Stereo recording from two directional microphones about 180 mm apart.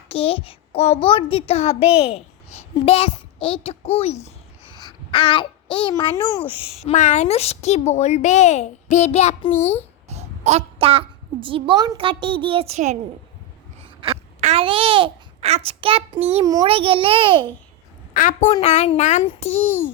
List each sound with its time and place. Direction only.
0.1 s a woman's voice: 30° left (ahead or behind)
4.2 s a sound: 30° left (ahead or behind)
6.7 s a woman's voice: 40° left (ahead or behind)
10.1 s a child's voice: 35° right (ahead or behind)
14.0 s a child's voice: 30° right (ahead or behind)
16.4 s a child's voice: 20° right (ahead or behind)
16.6 s a child's voice: 30° right (ahead or behind)
18.2 s a woman's voice: 45° left (ahead or behind)